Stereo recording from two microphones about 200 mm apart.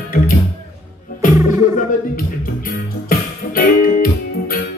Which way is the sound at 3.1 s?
45° left (ahead or behind).